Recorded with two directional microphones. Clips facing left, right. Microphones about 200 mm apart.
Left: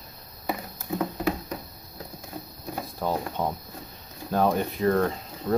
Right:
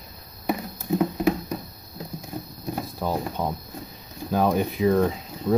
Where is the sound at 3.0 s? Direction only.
5° right (ahead or behind).